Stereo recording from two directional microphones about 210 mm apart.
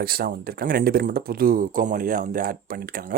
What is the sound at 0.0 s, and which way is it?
Speech, 45° right (ahead or behind).